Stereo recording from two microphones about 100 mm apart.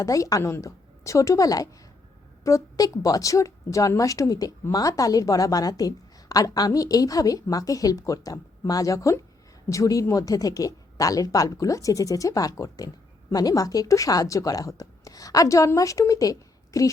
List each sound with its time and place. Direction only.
0.0 s a woman's voice: 35° left (ahead or behind)